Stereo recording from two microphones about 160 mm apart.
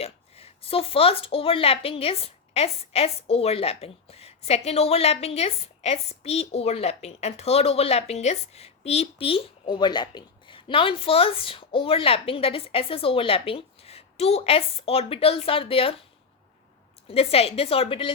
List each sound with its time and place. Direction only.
0.0 s a woman's voice: 40° left (ahead or behind)
17.1 s a woman's voice: 40° left (ahead or behind)